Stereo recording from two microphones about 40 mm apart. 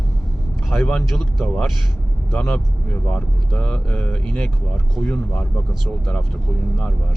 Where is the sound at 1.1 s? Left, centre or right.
Centre.